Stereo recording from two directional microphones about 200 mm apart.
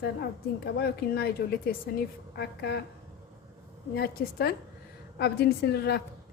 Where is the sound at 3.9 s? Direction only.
50° left (ahead or behind).